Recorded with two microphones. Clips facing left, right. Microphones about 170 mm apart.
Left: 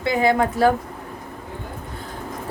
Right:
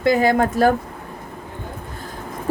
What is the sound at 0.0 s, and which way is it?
Speech, 40° right (ahead or behind).